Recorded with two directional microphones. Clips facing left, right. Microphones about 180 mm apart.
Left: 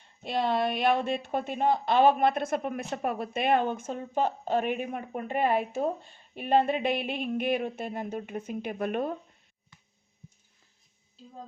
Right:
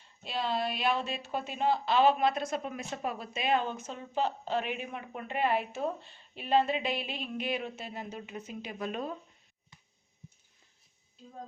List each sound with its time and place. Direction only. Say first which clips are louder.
0.2 s speech: left 5 dB; 55° left (ahead or behind)